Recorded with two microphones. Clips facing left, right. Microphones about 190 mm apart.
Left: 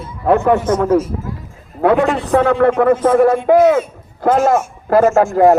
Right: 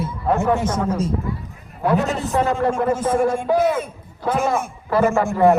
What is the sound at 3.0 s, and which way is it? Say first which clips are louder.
A man's voice: left 7 dB; 55° left (ahead or behind).